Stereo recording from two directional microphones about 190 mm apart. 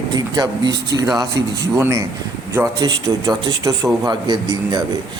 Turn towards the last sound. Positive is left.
turn(degrees=-20)  # may be behind; listen again after turning